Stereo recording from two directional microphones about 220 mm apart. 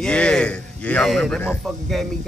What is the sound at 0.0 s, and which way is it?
A man's voice, 5° left (ahead or behind).